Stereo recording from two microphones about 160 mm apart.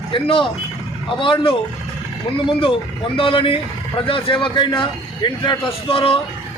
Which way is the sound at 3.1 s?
35° left (ahead or behind).